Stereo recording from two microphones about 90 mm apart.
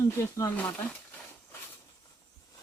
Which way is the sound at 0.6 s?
20° left (ahead or behind).